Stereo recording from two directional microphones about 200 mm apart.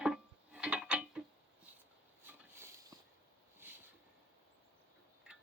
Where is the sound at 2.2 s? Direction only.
10° right (ahead or behind).